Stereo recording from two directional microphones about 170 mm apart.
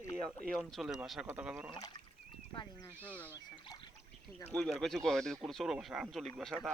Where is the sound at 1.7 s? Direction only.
25° left (ahead or behind).